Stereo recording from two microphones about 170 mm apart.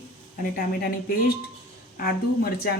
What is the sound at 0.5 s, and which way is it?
A woman's voice, 60° left (ahead or behind).